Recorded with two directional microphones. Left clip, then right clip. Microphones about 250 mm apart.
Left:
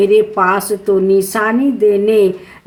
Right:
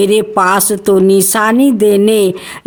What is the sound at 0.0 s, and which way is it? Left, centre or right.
A woman's voice, right.